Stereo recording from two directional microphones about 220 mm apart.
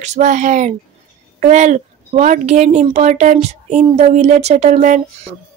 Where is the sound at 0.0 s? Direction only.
30° right (ahead or behind).